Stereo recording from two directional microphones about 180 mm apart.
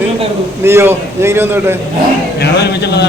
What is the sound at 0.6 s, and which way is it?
A man's voice, 15° right (ahead or behind).